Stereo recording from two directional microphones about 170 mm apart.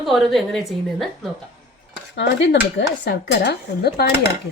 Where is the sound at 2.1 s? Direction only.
90° left.